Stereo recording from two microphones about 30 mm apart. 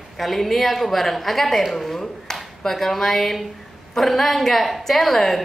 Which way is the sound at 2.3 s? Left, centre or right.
Centre.